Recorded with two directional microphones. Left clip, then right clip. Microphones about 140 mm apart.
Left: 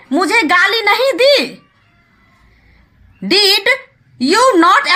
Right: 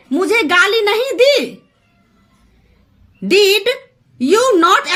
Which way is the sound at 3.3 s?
20° right (ahead or behind).